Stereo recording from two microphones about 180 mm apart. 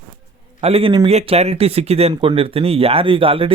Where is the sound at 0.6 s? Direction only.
30° right (ahead or behind).